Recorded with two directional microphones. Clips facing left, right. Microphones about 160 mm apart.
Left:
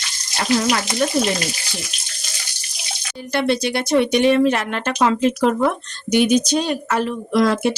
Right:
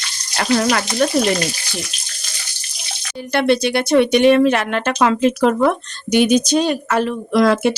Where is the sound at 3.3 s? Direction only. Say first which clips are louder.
Right 3 dB; 65° right (ahead or behind).